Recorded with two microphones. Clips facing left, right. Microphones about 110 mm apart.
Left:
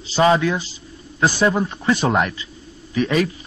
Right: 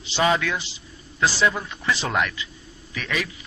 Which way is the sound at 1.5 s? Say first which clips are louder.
Left 7 dB; 30° left (ahead or behind).